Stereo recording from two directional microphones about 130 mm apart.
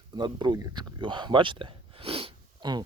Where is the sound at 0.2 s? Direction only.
35° right (ahead or behind).